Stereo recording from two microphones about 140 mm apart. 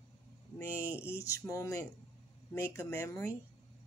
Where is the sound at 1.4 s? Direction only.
25° left (ahead or behind).